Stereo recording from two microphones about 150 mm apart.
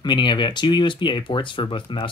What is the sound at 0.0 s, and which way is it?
Speech, 30° left (ahead or behind).